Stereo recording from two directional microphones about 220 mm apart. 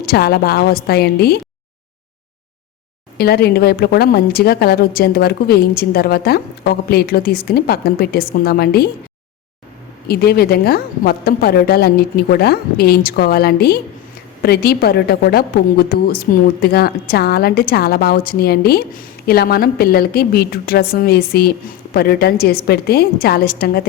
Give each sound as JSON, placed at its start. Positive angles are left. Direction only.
{"t": 0.0, "sound": "a woman's voice", "side_deg": 45}
{"t": 3.2, "sound": "a woman's voice", "side_deg": 45}
{"t": 10.1, "sound": "a woman's voice", "side_deg": 45}